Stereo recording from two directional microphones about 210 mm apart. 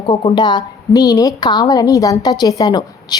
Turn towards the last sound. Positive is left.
turn(degrees=15)  # may be behind; listen again after turning